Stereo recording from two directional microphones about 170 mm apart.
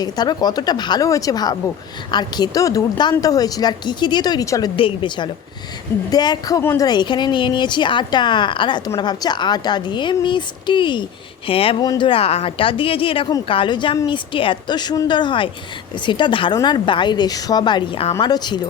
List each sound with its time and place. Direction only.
0.0 s a woman's voice: 25° left (ahead or behind)